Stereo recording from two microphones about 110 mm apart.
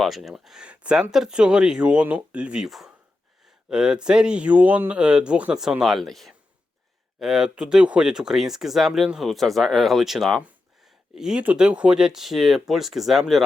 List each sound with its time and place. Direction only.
0.0 s speech: centre (ahead or behind)